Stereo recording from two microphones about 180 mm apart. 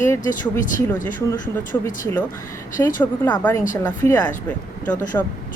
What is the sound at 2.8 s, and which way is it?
Speech, 15° left (ahead or behind).